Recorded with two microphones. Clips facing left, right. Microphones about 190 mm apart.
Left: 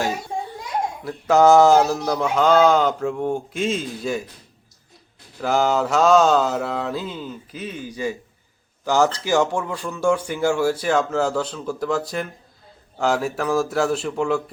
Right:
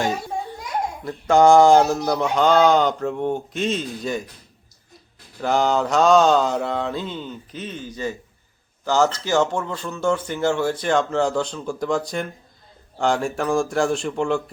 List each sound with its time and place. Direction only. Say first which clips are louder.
1.0 s mantra: even; 5° left (ahead or behind)
5.4 s mantra: even; 5° left (ahead or behind)
8.8 s speech: left 1 dB; 15° left (ahead or behind)
13.0 s mantra: even; 5° left (ahead or behind)